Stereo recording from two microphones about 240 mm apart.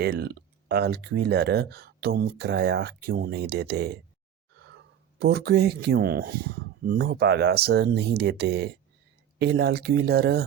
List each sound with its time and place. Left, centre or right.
0.0 s speech: right
5.2 s speech: right